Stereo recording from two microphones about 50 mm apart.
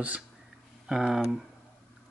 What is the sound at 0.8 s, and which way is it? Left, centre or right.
Speech, centre.